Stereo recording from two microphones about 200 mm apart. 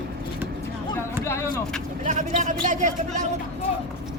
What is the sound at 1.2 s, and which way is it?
Vehicle, 15° left (ahead or behind).